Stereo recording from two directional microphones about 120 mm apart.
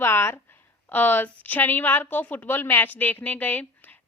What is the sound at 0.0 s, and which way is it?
A woman's voice, 20° left (ahead or behind).